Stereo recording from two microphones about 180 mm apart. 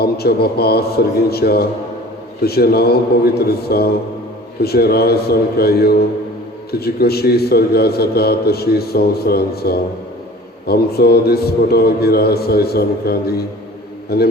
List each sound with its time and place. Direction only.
0.0 s a man's voice: 60° left (ahead or behind)